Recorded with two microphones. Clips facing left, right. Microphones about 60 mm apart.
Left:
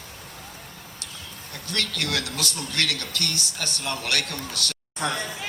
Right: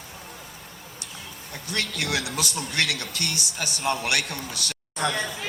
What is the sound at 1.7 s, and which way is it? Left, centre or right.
A man's voice, centre.